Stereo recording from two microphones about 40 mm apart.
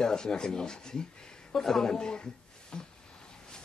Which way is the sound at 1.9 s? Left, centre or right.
Centre.